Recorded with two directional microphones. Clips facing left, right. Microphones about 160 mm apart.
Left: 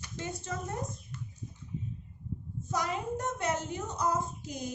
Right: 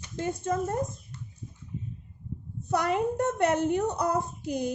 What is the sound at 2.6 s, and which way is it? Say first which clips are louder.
A woman's voice: right 8 dB; 60° right (ahead or behind).